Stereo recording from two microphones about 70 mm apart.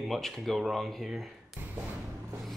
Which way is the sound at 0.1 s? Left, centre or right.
Centre.